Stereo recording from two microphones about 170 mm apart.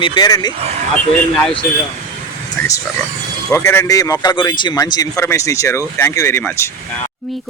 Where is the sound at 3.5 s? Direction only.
15° left (ahead or behind).